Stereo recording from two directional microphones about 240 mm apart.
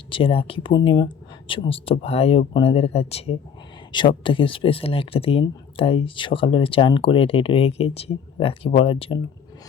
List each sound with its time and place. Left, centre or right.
0.1 s speech: left